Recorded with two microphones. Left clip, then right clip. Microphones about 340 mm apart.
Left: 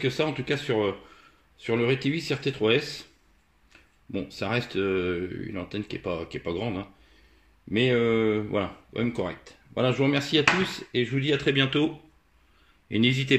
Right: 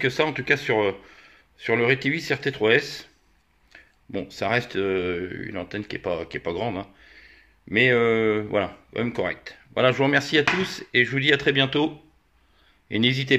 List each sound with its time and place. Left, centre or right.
0.0 s speech: right
4.1 s speech: centre